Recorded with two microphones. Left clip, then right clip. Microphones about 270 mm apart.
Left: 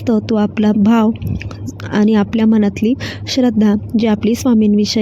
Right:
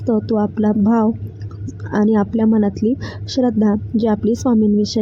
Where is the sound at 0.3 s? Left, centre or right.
Left.